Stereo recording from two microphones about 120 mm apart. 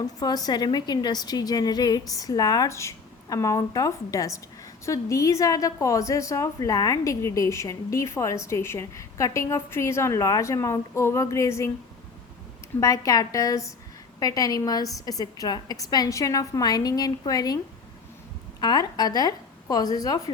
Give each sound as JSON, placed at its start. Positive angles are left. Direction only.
{"t": 0.0, "sound": "a woman's voice", "side_deg": 35}
{"t": 12.8, "sound": "a woman's voice", "side_deg": 30}
{"t": 18.6, "sound": "a woman's voice", "side_deg": 35}